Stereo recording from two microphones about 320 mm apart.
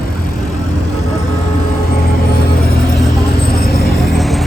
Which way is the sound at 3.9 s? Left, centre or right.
Centre.